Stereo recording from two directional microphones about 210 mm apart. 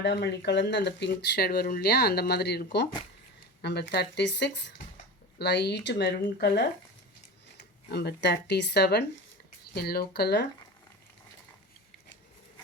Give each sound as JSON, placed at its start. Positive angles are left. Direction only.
{"t": 0.0, "sound": "speech", "side_deg": 55}
{"t": 7.9, "sound": "speech", "side_deg": 50}